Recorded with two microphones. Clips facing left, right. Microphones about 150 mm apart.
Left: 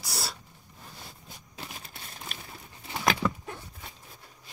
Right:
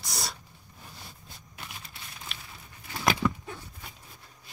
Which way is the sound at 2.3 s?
45° left (ahead or behind).